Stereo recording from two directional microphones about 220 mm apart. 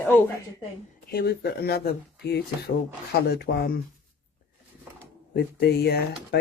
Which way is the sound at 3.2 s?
45° left (ahead or behind).